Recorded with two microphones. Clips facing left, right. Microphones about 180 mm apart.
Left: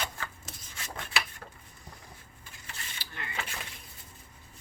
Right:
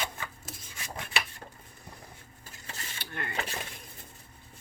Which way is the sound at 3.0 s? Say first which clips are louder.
Right 6 dB; 55° right (ahead or behind).